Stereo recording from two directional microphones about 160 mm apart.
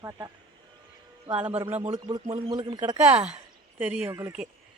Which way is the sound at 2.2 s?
35° right (ahead or behind).